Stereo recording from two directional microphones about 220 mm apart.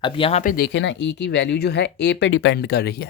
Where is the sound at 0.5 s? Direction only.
50° left (ahead or behind).